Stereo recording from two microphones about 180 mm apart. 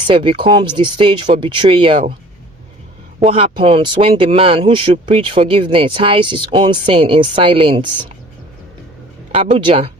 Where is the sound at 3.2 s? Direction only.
30° right (ahead or behind).